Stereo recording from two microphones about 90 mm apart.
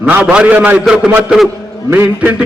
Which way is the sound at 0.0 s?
15° right (ahead or behind).